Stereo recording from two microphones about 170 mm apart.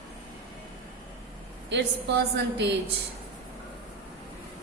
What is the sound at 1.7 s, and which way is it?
A woman's voice, 85° right.